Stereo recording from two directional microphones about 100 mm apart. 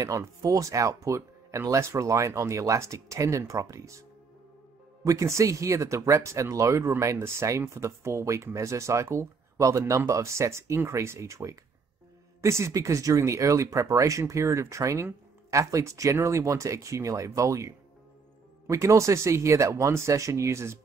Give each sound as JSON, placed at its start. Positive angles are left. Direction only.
{"t": 0.0, "sound": "speech", "side_deg": -35}
{"t": 5.0, "sound": "speech", "side_deg": -30}